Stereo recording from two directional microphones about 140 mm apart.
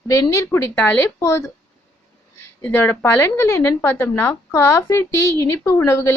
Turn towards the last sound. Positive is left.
turn(degrees=20)  # may be behind; listen again after turning